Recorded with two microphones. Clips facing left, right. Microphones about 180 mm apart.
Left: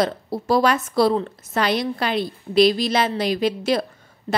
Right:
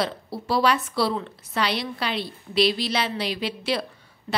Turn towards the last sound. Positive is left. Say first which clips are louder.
# left 5 dB
turn(degrees=45)  # may be behind; listen again after turning